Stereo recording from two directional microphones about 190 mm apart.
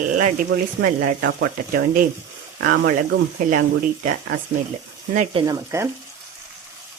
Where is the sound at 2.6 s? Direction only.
65° right (ahead or behind).